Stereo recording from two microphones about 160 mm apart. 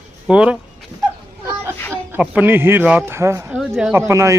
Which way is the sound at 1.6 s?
15° right (ahead or behind).